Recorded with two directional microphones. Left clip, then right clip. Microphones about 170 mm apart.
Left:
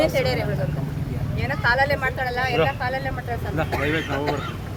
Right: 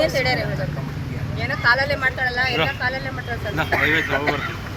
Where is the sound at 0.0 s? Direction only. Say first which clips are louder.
Right 1 dB; 10° left (ahead or behind).